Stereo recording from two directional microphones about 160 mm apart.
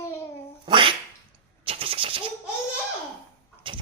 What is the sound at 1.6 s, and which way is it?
Vehicle, 35° right (ahead or behind).